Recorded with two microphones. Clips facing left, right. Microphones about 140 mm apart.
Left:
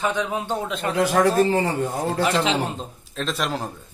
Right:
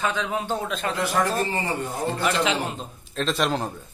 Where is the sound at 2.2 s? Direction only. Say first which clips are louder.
Left 2 dB; 35° left (ahead or behind).